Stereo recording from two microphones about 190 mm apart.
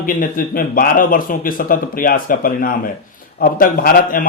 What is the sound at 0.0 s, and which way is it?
Speech, 50° left (ahead or behind).